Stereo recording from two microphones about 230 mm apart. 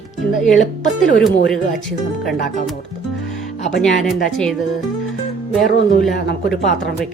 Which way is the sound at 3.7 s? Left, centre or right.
Centre.